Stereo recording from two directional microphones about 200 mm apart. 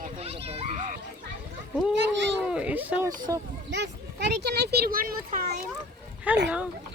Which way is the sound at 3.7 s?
60° right (ahead or behind).